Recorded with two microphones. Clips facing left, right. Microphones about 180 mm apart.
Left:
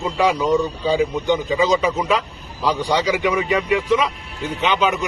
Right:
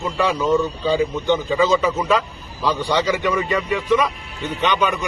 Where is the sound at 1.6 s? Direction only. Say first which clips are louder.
Even; 10° left (ahead or behind).